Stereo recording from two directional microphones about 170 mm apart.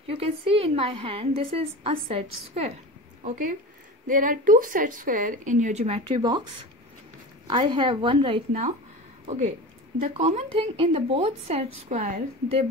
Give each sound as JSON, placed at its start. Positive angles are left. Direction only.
{"t": 0.0, "sound": "a woman's voice", "side_deg": -35}
{"t": 3.3, "sound": "a woman's voice", "side_deg": -50}
{"t": 9.9, "sound": "a woman's voice", "side_deg": -40}